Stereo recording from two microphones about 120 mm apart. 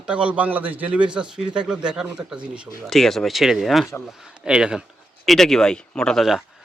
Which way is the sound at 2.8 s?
Centre (ahead or behind).